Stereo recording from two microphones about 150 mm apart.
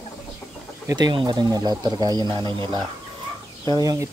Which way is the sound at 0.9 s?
30° right (ahead or behind).